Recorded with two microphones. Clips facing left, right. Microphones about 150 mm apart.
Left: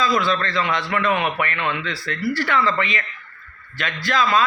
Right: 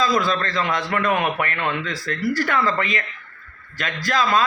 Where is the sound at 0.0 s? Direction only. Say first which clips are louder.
Even; 40° right (ahead or behind).